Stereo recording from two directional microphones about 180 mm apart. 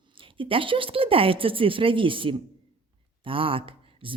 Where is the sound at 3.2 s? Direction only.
30° right (ahead or behind).